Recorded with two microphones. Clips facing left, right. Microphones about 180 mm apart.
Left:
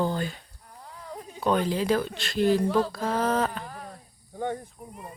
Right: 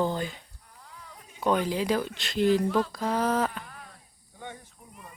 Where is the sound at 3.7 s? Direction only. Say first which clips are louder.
Left 7 dB; 40° left (ahead or behind).